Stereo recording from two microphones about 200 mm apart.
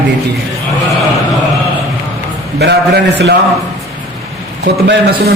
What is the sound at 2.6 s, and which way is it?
Speech, 55° right (ahead or behind).